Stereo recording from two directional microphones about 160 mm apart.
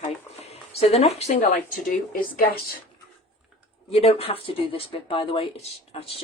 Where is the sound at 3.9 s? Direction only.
40° left (ahead or behind).